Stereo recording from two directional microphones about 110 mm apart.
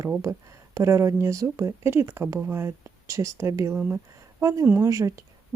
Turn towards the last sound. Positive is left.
turn(degrees=-25)  # may be behind; listen again after turning